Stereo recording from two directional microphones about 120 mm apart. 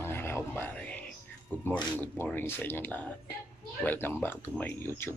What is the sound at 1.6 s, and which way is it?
Speech, 15° left (ahead or behind).